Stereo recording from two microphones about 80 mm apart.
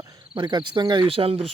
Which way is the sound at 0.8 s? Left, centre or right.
Right.